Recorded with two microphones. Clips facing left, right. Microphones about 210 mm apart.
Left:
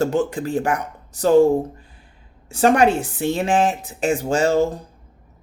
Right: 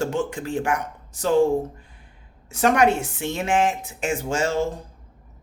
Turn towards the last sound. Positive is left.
turn(degrees=35)  # may be behind; listen again after turning